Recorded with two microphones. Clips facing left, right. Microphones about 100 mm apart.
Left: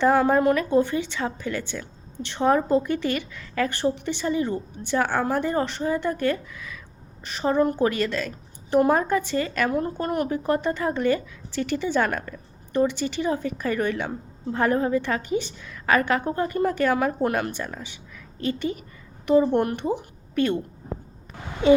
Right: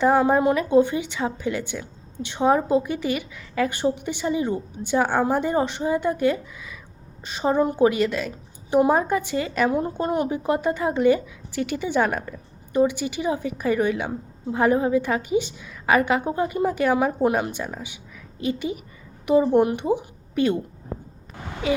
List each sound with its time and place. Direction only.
0.0 s a woman's voice: 15° right (ahead or behind)